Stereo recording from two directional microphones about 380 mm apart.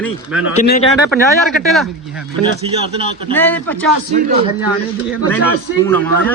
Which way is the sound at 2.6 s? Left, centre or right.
Centre.